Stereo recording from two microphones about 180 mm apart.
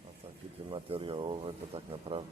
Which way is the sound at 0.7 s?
30° right (ahead or behind).